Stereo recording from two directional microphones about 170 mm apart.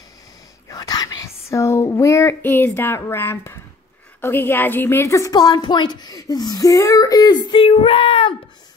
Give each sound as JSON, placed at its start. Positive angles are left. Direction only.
{"t": 0.7, "sound": "whispering", "side_deg": 20}
{"t": 4.2, "sound": "a woman's voice", "side_deg": 10}